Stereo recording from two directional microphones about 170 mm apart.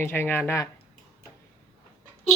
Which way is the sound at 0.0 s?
15° left (ahead or behind).